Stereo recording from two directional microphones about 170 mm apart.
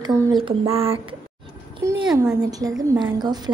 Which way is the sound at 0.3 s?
30° right (ahead or behind).